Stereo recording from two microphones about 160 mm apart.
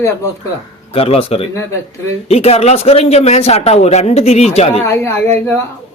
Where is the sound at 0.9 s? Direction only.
35° left (ahead or behind).